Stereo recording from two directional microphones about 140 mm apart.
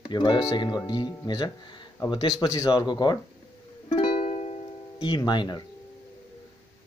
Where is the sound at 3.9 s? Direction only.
40° left (ahead or behind).